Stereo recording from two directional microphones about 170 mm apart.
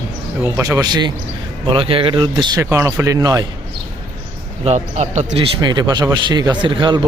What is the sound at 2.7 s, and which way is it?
Speech, 15° right (ahead or behind).